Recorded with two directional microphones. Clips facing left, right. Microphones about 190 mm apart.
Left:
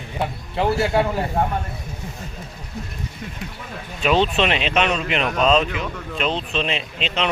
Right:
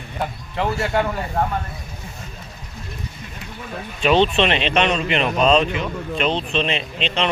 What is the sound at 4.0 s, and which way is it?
Speech, 5° left (ahead or behind).